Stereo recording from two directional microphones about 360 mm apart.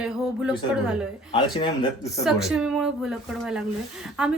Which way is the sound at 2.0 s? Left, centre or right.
Centre.